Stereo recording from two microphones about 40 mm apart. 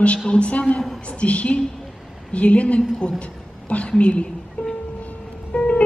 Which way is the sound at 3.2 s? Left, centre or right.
Left.